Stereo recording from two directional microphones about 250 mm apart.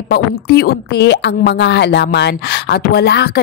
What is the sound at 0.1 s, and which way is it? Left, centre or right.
A woman's voice, left.